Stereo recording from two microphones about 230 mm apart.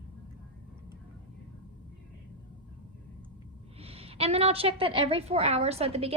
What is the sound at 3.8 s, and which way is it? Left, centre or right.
A woman's voice, right.